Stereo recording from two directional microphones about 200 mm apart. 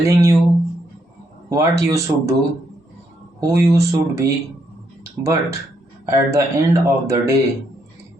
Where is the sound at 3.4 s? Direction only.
15° right (ahead or behind).